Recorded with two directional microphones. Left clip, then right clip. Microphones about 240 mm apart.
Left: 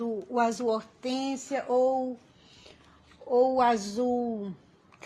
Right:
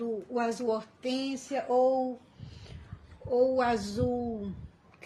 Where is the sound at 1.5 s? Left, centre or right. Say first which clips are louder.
Even; left.